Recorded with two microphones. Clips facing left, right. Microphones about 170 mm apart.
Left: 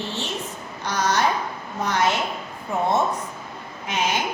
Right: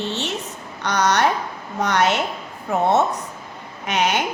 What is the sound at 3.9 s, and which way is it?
Speech, 70° right (ahead or behind).